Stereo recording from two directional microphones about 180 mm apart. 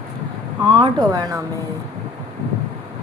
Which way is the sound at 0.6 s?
25° right (ahead or behind).